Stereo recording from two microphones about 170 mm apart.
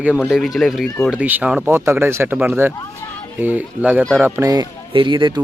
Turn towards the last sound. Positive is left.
turn(degrees=-30)  # may be behind; listen again after turning